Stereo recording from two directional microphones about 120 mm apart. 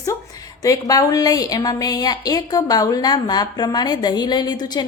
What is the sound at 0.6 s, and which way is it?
A woman's voice, 30° left (ahead or behind).